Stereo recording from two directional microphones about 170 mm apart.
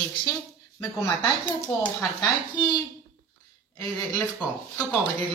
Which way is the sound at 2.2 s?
25° left (ahead or behind).